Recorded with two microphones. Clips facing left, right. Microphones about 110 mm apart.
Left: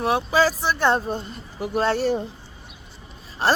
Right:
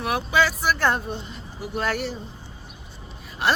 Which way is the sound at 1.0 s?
45° left (ahead or behind).